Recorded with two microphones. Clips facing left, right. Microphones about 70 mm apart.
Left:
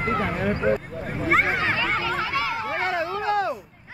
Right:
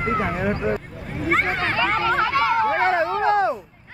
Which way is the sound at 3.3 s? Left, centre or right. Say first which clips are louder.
Right 1 dB; right.